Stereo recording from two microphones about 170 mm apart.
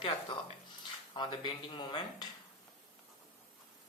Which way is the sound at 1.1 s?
30° left (ahead or behind).